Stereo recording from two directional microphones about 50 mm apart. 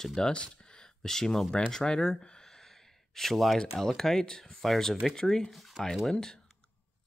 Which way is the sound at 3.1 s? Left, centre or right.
Centre.